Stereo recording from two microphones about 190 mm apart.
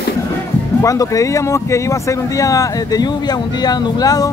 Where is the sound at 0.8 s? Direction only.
15° left (ahead or behind).